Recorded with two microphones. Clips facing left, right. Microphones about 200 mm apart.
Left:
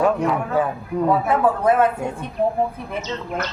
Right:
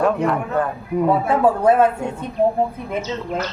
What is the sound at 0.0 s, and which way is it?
Speech, 5° left (ahead or behind).